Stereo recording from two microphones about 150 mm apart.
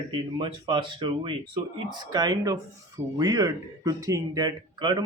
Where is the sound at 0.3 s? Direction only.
30° right (ahead or behind).